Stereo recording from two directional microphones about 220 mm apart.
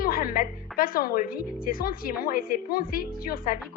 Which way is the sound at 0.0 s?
40° left (ahead or behind).